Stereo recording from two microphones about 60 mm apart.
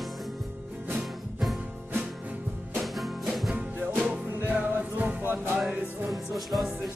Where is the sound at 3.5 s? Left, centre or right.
Right.